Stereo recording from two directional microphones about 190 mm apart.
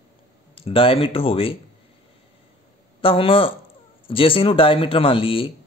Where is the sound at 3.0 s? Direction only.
30° left (ahead or behind).